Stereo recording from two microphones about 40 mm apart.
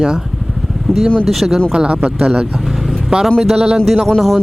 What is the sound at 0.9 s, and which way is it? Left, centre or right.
Speech, centre.